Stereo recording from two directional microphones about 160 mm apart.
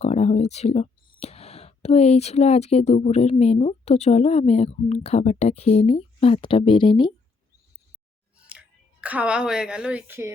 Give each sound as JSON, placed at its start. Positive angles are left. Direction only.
{"t": 0.0, "sound": "speech", "side_deg": 45}
{"t": 8.4, "sound": "speech", "side_deg": -5}